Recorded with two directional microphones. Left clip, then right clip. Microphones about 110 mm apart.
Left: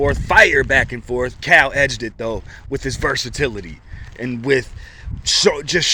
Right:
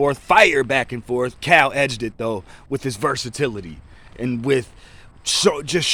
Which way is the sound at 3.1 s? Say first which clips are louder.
Left 2 dB; 25° right (ahead or behind).